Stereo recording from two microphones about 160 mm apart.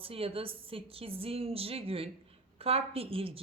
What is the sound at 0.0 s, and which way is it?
Speech, 35° right (ahead or behind).